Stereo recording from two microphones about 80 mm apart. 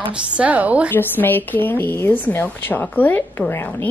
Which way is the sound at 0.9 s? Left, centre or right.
Left.